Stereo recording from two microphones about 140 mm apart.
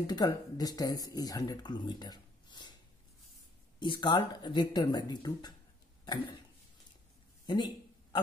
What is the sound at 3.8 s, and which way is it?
Speech, 35° left (ahead or behind).